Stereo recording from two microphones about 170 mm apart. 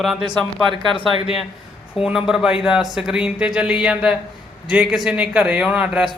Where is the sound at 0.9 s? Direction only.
35° left (ahead or behind).